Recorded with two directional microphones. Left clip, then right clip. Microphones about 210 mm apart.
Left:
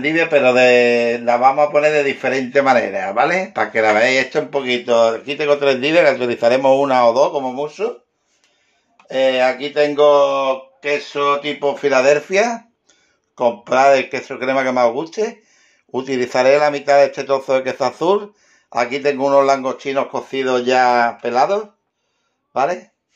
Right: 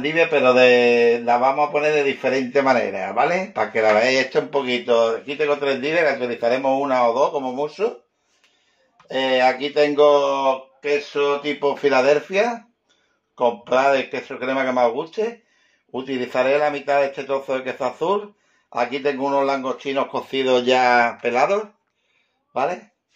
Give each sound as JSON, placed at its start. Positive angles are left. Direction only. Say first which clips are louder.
{"t": 0.0, "sound": "a man's voice", "louder": "left 3 dB", "side_deg": 20}
{"t": 7.4, "sound": "speech", "louder": "left 2 dB", "side_deg": 15}
{"t": 9.0, "sound": "speech", "louder": "left 3 dB", "side_deg": 15}
{"t": 12.3, "sound": "speech", "louder": "left 4 dB", "side_deg": 35}
{"t": 22.5, "sound": "speech", "louder": "left 5 dB", "side_deg": 20}